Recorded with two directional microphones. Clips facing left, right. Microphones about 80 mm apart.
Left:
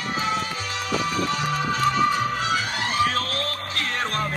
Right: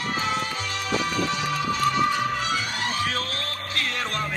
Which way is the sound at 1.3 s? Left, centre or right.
Left.